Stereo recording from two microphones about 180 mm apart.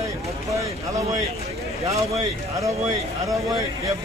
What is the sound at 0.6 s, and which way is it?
Speech, 15° right (ahead or behind).